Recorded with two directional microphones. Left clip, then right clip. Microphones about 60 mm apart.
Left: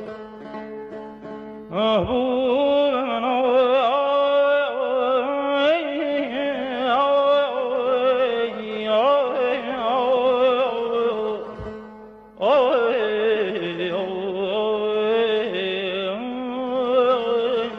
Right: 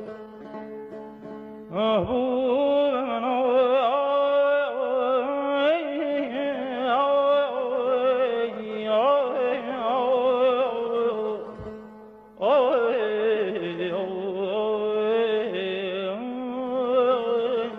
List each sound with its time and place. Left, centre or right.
1.8 s music: left